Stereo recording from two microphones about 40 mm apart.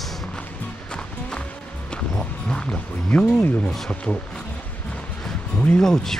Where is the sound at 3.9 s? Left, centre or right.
Left.